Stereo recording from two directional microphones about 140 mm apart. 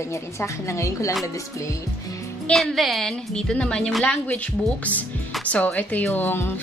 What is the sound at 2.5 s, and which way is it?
A woman's voice, centre (ahead or behind).